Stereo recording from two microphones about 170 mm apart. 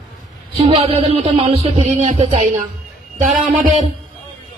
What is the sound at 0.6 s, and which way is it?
Speech, 35° right (ahead or behind).